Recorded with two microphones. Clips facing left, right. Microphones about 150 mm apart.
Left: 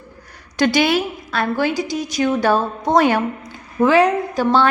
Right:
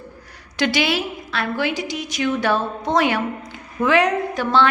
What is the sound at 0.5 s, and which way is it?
A woman's voice, 45° left (ahead or behind).